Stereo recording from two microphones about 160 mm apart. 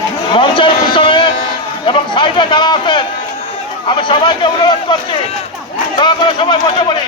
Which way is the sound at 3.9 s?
30° left (ahead or behind).